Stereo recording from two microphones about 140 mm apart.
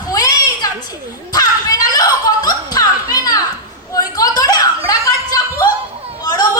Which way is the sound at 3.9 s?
25° left (ahead or behind).